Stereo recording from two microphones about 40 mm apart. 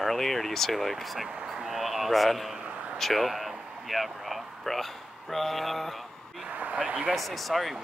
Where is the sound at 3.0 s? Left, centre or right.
Centre.